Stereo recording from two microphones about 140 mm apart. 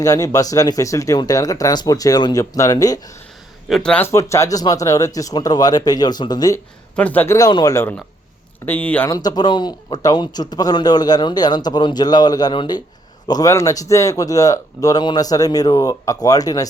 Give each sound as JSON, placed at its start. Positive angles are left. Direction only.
{"t": 0.0, "sound": "a man's voice", "side_deg": 25}
{"t": 3.7, "sound": "speech", "side_deg": 5}
{"t": 4.0, "sound": "a man's voice", "side_deg": 20}
{"t": 6.9, "sound": "speech", "side_deg": 10}
{"t": 7.3, "sound": "a man's voice", "side_deg": 25}
{"t": 9.0, "sound": "a man's voice", "side_deg": 25}